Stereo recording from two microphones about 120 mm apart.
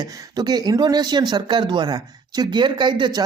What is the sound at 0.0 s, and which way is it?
Speech, 30° right (ahead or behind).